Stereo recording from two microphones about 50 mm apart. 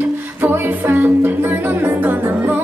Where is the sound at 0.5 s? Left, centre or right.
Right.